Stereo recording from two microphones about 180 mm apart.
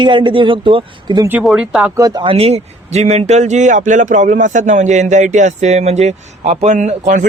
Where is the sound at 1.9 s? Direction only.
20° right (ahead or behind).